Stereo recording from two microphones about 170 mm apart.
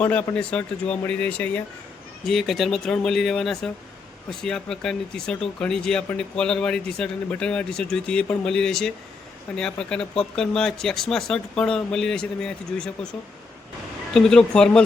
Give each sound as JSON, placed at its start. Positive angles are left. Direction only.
{"t": 0.0, "sound": "speech", "side_deg": 5}